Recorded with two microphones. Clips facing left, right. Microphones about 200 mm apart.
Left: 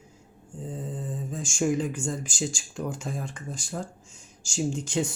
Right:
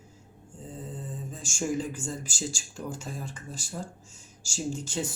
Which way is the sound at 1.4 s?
5° right (ahead or behind).